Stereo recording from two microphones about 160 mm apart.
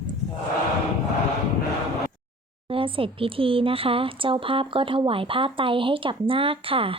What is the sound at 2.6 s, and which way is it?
Speech, 35° right (ahead or behind).